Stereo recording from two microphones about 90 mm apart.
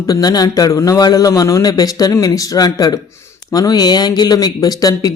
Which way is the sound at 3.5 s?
45° left (ahead or behind).